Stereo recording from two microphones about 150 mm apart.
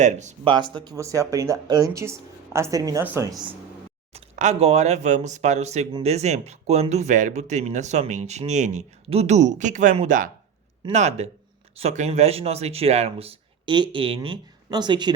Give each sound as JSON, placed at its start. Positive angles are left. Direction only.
{"t": 0.0, "sound": "speech", "side_deg": -50}
{"t": 0.4, "sound": "speech", "side_deg": -30}
{"t": 4.1, "sound": "speech", "side_deg": -50}